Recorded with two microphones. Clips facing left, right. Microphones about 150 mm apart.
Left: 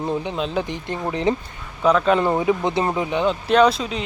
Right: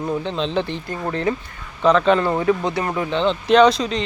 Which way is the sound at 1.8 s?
10° left (ahead or behind).